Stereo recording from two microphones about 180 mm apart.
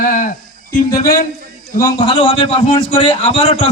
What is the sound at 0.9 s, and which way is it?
Speech, 50° left (ahead or behind).